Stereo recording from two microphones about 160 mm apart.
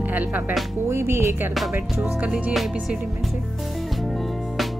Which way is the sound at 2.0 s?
5° right (ahead or behind).